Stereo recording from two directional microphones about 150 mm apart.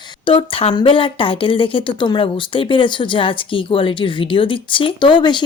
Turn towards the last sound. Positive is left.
turn(degrees=30)  # may be behind; listen again after turning